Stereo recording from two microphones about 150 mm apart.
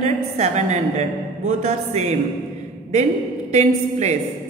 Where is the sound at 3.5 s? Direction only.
50° right (ahead or behind).